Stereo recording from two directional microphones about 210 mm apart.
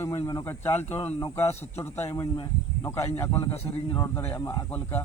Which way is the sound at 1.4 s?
10° left (ahead or behind).